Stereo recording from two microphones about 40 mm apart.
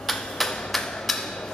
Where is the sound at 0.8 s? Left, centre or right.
Centre.